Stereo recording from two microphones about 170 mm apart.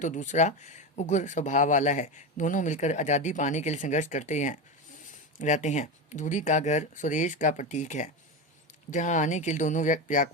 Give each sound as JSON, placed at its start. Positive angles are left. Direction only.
{"t": 0.0, "sound": "speech", "side_deg": 45}